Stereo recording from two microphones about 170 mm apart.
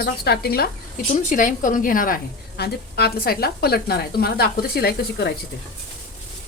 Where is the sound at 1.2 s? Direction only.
50° left (ahead or behind); by 5.3 s 70° left (ahead or behind).